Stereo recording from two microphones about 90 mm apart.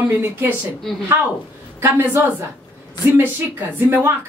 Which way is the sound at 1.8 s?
25° right (ahead or behind).